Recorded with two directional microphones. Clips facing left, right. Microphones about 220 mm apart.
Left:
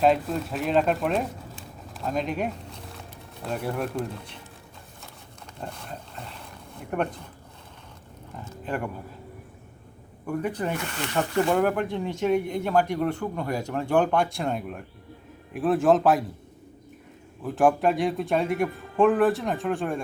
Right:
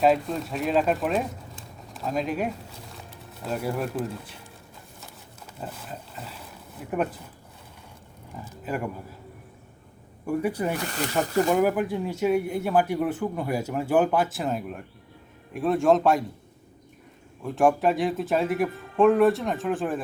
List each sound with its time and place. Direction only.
0.0 s speech: centre (ahead or behind)
5.5 s speech: 5° right (ahead or behind)
8.6 s a man's voice: 5° right (ahead or behind)
10.2 s speech: 10° right (ahead or behind)
10.8 s speech: 40° right (ahead or behind)
11.4 s speech: 5° right (ahead or behind)
17.4 s speech: centre (ahead or behind)